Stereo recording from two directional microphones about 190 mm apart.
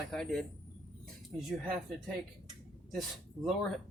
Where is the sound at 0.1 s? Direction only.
5° left (ahead or behind).